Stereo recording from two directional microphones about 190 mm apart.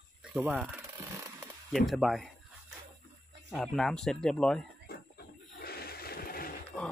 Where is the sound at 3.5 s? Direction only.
5° left (ahead or behind).